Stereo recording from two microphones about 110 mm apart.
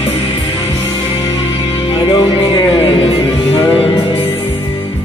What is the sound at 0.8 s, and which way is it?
Music, 30° left (ahead or behind).